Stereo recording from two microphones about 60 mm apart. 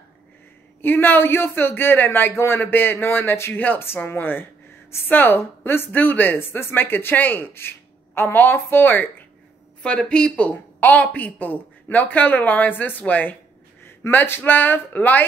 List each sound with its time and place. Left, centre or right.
0.8 s speech: left
3.5 s speech: left
9.8 s a woman's voice: centre